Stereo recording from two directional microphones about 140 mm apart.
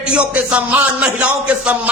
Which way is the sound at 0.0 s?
10° right (ahead or behind).